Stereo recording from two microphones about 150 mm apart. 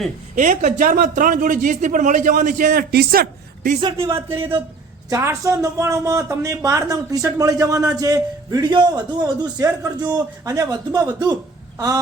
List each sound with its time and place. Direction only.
0.3 s speech: 55° right (ahead or behind); by 3.8 s 75° right (ahead or behind)
3.8 s speech: 35° right (ahead or behind)
4.0 s speech: 20° right (ahead or behind)